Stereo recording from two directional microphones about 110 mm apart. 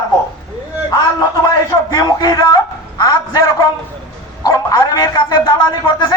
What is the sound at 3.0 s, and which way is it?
Speech, 30° left (ahead or behind).